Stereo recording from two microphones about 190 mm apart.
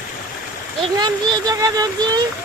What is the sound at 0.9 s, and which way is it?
Speech, 20° right (ahead or behind).